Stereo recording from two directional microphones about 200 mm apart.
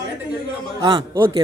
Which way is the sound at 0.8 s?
20° right (ahead or behind).